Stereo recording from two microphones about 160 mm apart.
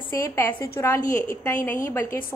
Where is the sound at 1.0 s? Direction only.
55° left (ahead or behind).